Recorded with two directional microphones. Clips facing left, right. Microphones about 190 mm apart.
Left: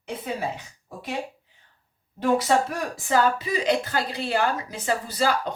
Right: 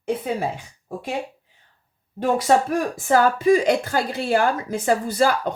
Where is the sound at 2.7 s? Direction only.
50° right (ahead or behind).